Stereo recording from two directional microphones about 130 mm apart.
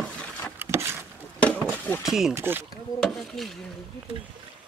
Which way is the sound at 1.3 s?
10° left (ahead or behind).